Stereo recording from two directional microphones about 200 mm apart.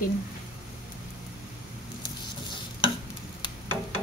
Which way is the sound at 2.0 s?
25° left (ahead or behind).